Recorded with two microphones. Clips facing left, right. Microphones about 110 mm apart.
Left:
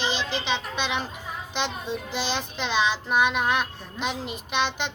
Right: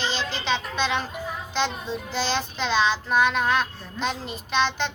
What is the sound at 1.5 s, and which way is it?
Child singing, 15° left (ahead or behind).